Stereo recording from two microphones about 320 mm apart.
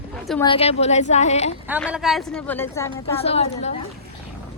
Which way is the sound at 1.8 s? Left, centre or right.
Centre.